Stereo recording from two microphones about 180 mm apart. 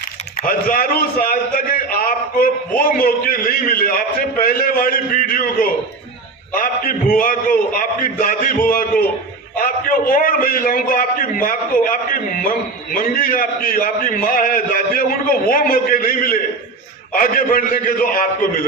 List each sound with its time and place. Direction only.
0.3 s a man's voice: 50° left (ahead or behind)
9.6 s a man's voice: 50° left (ahead or behind)